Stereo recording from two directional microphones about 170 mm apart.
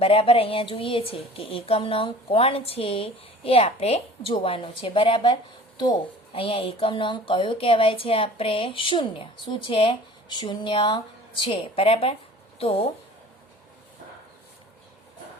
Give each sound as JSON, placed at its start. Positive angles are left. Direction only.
{"t": 0.0, "sound": "a woman's voice", "side_deg": 35}